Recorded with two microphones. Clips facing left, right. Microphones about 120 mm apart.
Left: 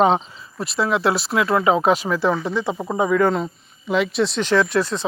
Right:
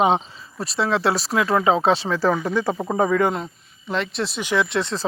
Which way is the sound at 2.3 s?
10° right (ahead or behind).